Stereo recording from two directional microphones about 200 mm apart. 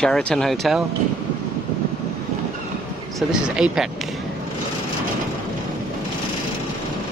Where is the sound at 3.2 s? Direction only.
5° right (ahead or behind).